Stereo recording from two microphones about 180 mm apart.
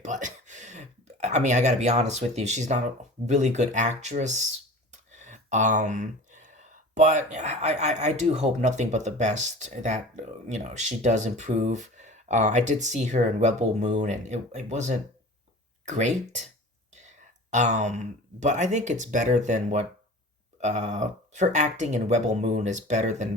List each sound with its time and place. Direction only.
0.0 s speech: 45° right (ahead or behind)
5.2 s a sound: 40° right (ahead or behind)
6.9 s speech: 40° right (ahead or behind)